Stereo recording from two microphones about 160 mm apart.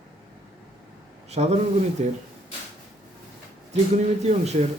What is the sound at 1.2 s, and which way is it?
Speech, 45° right (ahead or behind).